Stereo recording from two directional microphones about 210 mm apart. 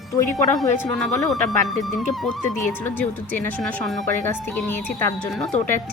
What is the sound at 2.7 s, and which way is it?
A woman's voice, 10° left (ahead or behind).